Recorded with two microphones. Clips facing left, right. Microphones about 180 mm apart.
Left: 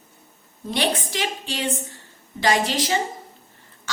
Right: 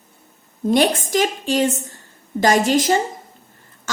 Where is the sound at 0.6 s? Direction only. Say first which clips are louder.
Right 8 dB; 45° right (ahead or behind).